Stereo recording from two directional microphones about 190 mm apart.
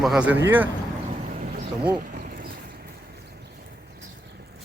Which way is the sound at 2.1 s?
55° right (ahead or behind).